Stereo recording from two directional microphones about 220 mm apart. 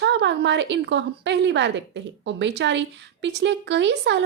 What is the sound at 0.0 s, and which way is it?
A woman's voice, 55° right (ahead or behind).